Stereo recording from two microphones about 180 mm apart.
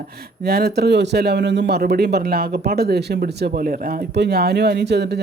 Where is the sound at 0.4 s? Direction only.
60° right (ahead or behind).